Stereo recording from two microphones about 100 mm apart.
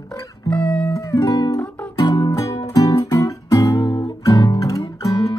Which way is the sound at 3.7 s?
55° left (ahead or behind).